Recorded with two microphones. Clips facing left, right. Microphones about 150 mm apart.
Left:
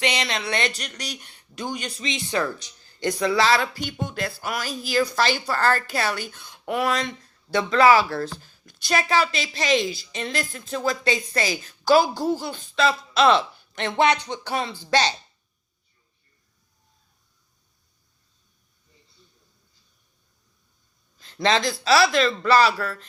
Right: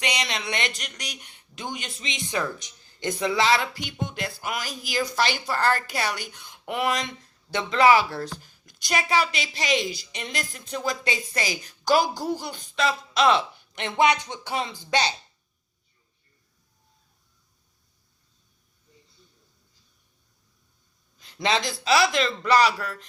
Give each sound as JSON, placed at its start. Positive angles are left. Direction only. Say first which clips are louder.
{"t": 0.2, "sound": "speech", "louder": "left 3 dB", "side_deg": -20}
{"t": 21.2, "sound": "a sound", "louder": "left 3 dB", "side_deg": -15}
{"t": 21.8, "sound": "speech", "louder": "left 3 dB", "side_deg": -20}